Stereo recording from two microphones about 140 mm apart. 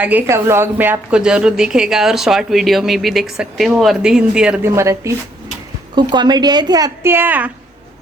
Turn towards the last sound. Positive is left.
turn(degrees=-10)  # may be behind; listen again after turning